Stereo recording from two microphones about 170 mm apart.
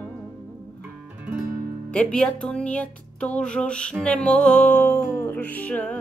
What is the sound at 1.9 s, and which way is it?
Music, 5° left (ahead or behind).